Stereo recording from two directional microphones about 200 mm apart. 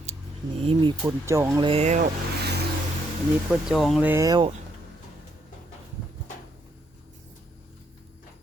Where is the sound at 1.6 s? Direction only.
35° right (ahead or behind).